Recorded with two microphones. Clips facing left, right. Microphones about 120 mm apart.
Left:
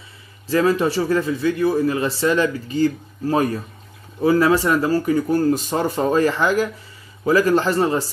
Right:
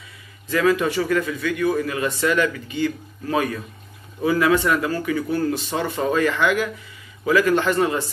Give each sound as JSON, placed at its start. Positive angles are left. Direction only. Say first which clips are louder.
{"t": 0.5, "sound": "a man's voice", "louder": "left 2 dB", "side_deg": 35}